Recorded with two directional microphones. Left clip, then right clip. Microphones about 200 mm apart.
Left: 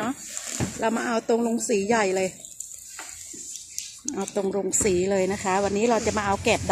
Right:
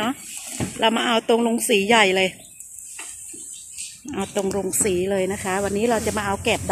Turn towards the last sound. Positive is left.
turn(degrees=5)  # may be behind; listen again after turning